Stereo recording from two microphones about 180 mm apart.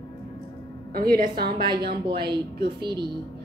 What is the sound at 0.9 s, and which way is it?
Speech, 55° right (ahead or behind).